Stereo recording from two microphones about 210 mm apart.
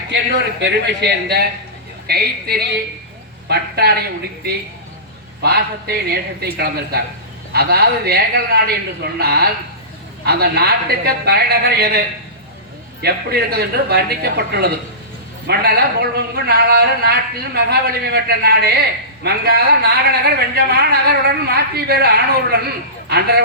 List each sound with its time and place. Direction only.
0.6 s speech: 50° right (ahead or behind)
5.4 s speech: 50° right (ahead or behind)